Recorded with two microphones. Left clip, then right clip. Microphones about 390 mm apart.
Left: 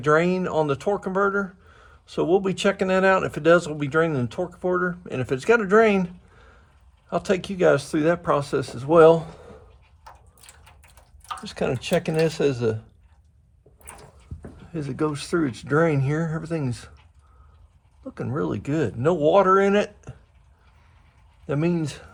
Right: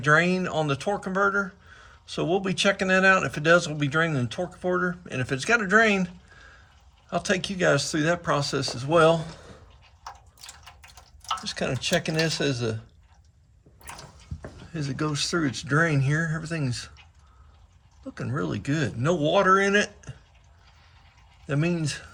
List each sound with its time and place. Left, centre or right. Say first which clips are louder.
0.0 s speech: left 1 dB; centre
11.4 s speech: left 5 dB; centre
14.7 s speech: left 4 dB; centre
18.1 s speech: left 3 dB; centre
21.4 s speech: left 3 dB; centre